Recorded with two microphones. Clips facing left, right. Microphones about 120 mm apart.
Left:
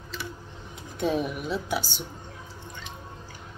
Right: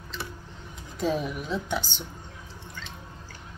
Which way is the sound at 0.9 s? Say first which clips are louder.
Left 1 dB; centre (ahead or behind).